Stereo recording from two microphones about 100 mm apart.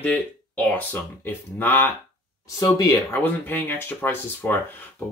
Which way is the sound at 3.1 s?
20° left (ahead or behind).